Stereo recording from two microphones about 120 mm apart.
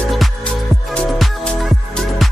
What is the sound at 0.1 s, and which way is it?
Music, 5° left (ahead or behind).